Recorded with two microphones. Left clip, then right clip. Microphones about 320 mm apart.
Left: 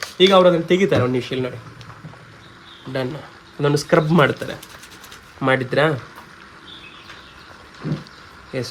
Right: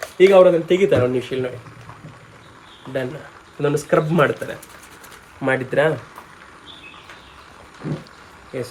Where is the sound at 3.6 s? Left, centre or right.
Centre.